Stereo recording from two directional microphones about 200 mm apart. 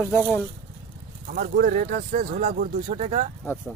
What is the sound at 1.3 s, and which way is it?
Speech, 45° right (ahead or behind).